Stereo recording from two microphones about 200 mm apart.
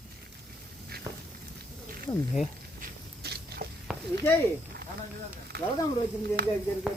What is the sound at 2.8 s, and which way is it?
Biting, 50° right (ahead or behind).